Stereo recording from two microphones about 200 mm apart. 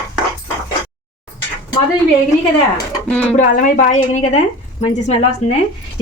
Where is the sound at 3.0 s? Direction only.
5° left (ahead or behind).